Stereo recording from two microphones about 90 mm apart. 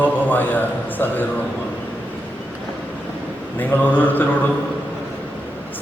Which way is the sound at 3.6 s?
20° left (ahead or behind).